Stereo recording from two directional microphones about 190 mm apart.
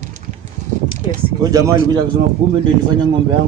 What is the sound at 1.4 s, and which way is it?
Speech, 20° right (ahead or behind).